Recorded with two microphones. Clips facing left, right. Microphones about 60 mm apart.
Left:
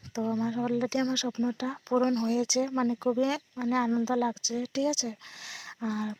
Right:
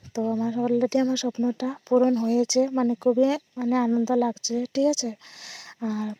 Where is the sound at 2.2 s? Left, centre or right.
Left.